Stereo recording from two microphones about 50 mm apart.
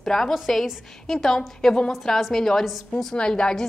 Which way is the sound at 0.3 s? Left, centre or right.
Centre.